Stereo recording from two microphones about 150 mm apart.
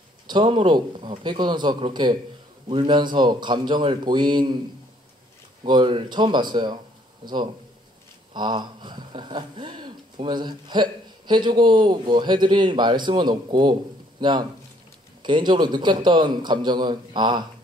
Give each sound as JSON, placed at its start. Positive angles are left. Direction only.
{"t": 0.3, "sound": "speech", "side_deg": -35}
{"t": 5.6, "sound": "speech", "side_deg": -30}